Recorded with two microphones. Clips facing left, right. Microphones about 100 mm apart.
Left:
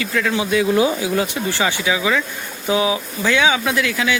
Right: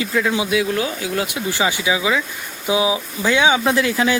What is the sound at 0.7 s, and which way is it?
Speech, 15° left (ahead or behind).